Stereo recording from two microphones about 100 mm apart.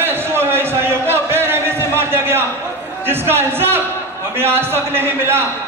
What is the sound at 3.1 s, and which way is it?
A man's voice, 25° right (ahead or behind).